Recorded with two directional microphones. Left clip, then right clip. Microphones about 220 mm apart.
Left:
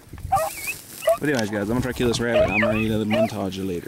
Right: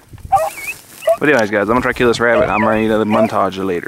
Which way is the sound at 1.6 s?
15° left (ahead or behind).